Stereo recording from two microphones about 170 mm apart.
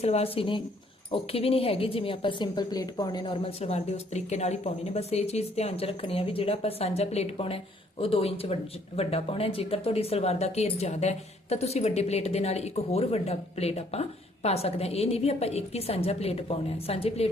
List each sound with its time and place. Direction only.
0.0 s speech: 35° left (ahead or behind)